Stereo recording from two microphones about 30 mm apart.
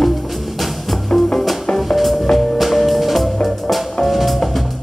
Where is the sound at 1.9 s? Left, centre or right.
Centre.